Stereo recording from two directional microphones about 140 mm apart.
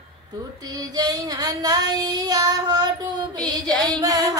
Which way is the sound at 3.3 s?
30° right (ahead or behind).